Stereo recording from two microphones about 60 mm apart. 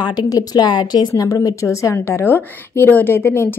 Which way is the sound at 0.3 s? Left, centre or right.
Left.